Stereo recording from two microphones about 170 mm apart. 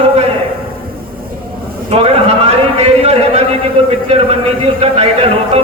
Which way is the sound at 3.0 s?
35° right (ahead or behind).